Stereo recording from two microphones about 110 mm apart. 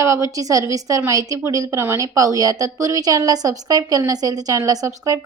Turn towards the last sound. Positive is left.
turn(degrees=-35)  # may be behind; listen again after turning